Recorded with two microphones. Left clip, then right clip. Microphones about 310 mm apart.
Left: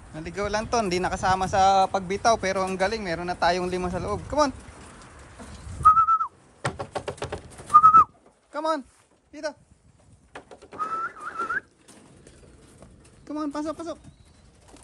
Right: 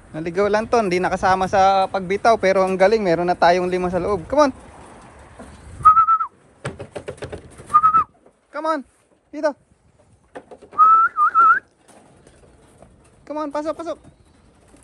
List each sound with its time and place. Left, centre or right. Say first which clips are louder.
0.1 s speech: right 9 dB; centre
5.8 s whistling: right 5 dB; centre
6.6 s a sound: left 1 dB; centre
8.5 s a sound: right 4 dB; centre
9.3 s speech: right 11 dB; centre
10.3 s bird: right 4 dB; centre
10.8 s whistling: right 18 dB; left
11.4 s whistling: right 15 dB; centre
13.2 s speech: right 6 dB; centre